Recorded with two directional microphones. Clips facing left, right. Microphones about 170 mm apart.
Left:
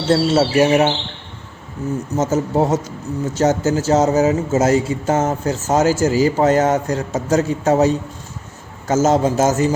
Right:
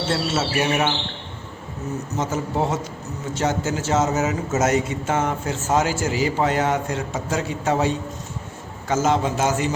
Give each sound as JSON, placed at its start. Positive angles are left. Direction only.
{"t": 0.1, "sound": "speech", "side_deg": 35}
{"t": 2.1, "sound": "speech", "side_deg": 40}